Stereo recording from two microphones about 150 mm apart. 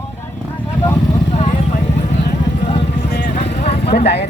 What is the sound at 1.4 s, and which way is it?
Vehicle, 55° left (ahead or behind).